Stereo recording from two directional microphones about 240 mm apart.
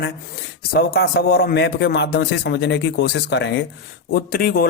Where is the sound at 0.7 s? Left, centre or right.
Left.